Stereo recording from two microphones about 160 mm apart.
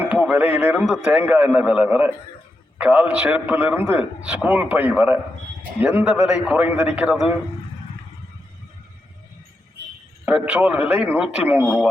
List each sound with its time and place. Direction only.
0.0 s a man's voice: 10° right (ahead or behind)
10.2 s a man's voice: 10° right (ahead or behind)